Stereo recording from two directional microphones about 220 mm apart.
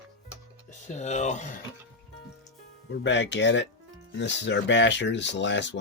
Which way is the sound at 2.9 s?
55° left (ahead or behind).